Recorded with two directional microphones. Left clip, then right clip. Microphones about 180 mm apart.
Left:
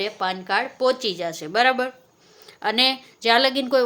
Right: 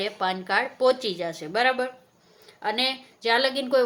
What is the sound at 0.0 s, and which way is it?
A woman's voice, 15° left (ahead or behind).